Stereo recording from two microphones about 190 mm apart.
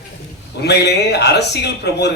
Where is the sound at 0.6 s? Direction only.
60° left (ahead or behind).